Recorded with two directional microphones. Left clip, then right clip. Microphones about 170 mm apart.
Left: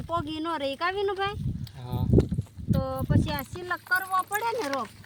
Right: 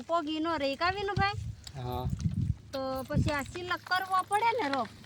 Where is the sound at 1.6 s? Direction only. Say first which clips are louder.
Right 1 dB; 35° right (ahead or behind).